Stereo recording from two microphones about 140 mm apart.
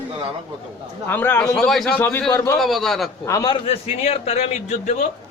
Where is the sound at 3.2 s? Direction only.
25° left (ahead or behind).